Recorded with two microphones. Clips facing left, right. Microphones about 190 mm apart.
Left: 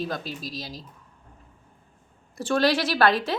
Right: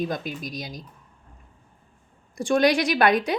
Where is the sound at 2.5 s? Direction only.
15° right (ahead or behind).